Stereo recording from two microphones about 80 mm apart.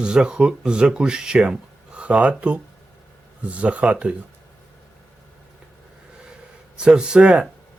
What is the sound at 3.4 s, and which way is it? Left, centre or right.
Speech, centre.